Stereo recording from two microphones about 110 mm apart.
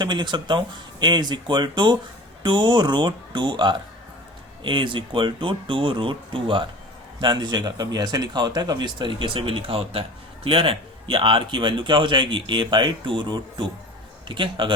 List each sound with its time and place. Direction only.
0.0 s speech: 45° right (ahead or behind)